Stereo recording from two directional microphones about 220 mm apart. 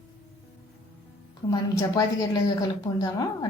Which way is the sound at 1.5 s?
15° left (ahead or behind).